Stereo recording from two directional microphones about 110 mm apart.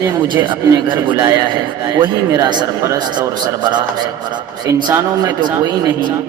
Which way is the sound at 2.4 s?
40° right (ahead or behind).